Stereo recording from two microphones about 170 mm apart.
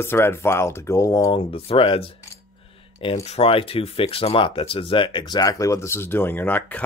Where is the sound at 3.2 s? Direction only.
35° left (ahead or behind); by 6.8 s 10° left (ahead or behind).